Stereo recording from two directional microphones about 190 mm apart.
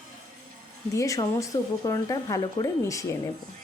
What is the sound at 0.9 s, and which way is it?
Speech, 15° left (ahead or behind).